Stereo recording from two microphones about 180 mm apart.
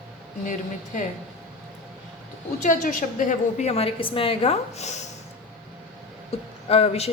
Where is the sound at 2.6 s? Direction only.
45° left (ahead or behind).